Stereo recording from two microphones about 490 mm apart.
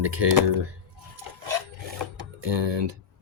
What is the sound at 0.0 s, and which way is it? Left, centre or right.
Cutlery, right.